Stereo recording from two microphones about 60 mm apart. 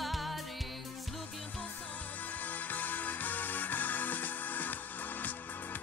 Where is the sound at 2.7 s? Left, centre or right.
Left.